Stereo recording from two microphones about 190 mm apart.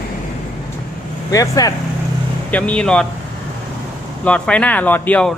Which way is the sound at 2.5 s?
5° left (ahead or behind).